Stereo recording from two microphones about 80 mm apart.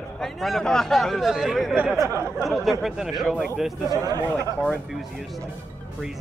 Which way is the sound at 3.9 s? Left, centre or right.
Right.